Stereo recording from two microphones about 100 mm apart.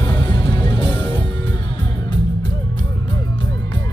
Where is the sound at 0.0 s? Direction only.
45° left (ahead or behind).